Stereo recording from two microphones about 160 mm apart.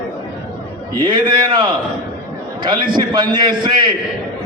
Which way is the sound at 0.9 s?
30° right (ahead or behind).